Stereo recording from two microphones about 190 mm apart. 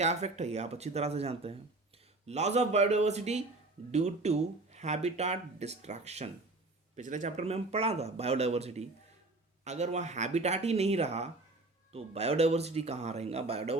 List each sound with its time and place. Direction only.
0.0 s speech: 35° right (ahead or behind)